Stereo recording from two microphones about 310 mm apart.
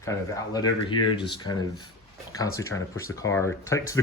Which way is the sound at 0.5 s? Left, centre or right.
Centre.